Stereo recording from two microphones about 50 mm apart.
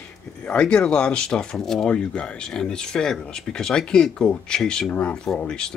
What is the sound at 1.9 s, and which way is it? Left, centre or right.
Speech, centre.